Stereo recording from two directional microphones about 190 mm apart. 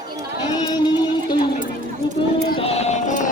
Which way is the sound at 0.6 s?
25° left (ahead or behind).